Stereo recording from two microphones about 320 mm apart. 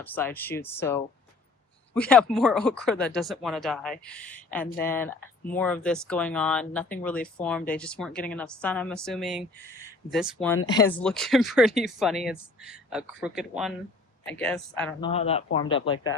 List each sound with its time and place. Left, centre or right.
0.0 s speech: centre
10.7 s speech: centre
15.0 s speech: centre